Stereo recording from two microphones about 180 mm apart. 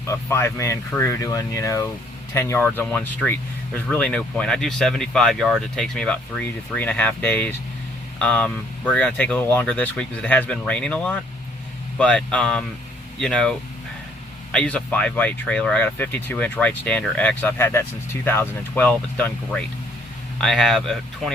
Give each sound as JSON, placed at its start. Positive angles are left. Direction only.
{"t": 0.0, "sound": "speech", "side_deg": 15}